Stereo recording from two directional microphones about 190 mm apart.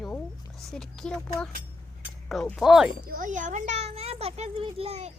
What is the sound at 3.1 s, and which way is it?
A child's voice, 45° right (ahead or behind).